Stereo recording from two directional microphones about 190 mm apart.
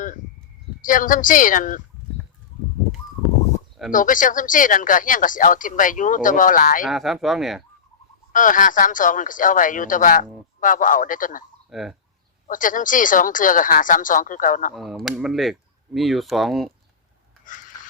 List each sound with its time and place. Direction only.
0.8 s speech: 45° left (ahead or behind)
3.9 s speech: 45° left (ahead or behind)
6.8 s speech: centre (ahead or behind)
8.3 s speech: 45° left (ahead or behind)
11.7 s speech: centre (ahead or behind)
12.5 s speech: 45° left (ahead or behind)
14.7 s speech: centre (ahead or behind)
17.4 s a sound: 45° left (ahead or behind)